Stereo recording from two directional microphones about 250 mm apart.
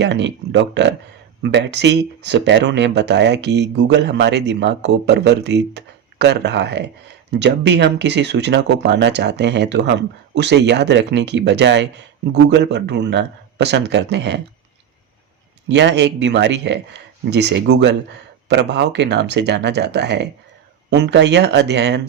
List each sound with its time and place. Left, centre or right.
0.0 s speech: right
15.7 s speech: right